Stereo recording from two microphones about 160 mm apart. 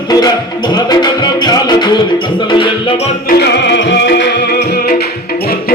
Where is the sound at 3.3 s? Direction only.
90° left.